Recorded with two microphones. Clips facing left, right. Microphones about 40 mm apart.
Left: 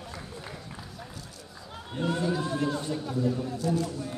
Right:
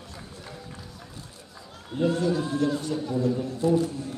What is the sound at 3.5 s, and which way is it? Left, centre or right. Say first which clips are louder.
Speech: right 5 dB; right.